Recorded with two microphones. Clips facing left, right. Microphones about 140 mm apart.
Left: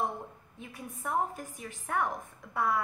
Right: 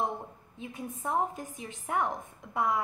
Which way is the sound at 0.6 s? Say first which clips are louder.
Right 5 dB; 20° right (ahead or behind).